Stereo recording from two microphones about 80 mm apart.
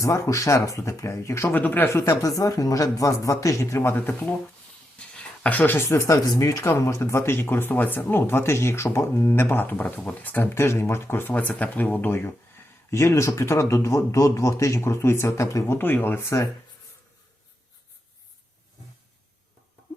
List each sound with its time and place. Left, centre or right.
0.0 s speech: left
1.5 s speech: left
1.9 s speech: left
4.9 s speech: centre; by 6.1 s left
6.2 s speech: left
6.7 s speech: left
15.8 s speech: left